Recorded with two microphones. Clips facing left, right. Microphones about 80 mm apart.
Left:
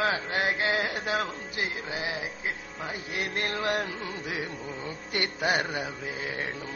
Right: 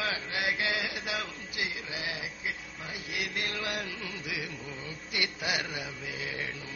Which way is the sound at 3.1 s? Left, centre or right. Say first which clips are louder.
Left 4 dB; left.